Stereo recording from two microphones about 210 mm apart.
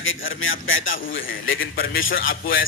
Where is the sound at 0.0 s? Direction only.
70° left (ahead or behind).